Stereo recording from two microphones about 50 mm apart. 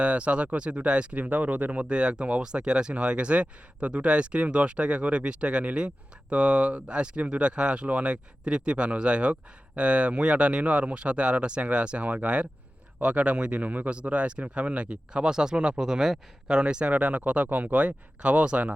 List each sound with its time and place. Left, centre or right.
0.0 s speech: right